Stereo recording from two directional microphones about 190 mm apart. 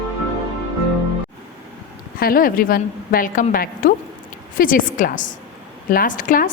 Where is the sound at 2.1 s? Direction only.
50° left (ahead or behind).